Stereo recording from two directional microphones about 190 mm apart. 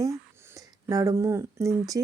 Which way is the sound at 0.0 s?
15° right (ahead or behind).